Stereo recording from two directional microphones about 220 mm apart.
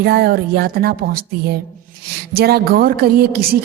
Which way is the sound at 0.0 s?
45° right (ahead or behind).